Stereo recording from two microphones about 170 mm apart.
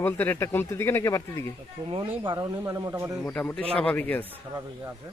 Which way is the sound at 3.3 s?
10° left (ahead or behind).